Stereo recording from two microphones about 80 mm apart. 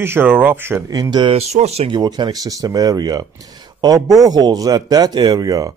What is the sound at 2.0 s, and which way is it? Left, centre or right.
A man's voice, right.